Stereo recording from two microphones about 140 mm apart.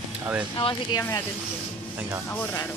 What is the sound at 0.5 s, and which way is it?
Speech, 35° left (ahead or behind).